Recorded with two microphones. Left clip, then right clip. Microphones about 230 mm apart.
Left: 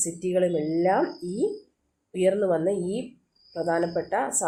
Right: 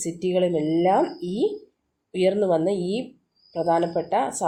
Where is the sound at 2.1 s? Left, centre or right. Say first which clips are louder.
Right 2 dB; right.